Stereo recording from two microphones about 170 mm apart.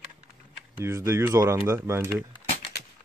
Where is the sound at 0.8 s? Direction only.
15° right (ahead or behind).